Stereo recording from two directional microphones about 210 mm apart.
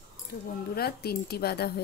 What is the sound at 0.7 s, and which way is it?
Speech, 50° left (ahead or behind).